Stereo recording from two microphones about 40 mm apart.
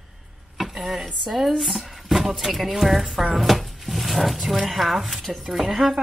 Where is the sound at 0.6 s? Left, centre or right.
Centre.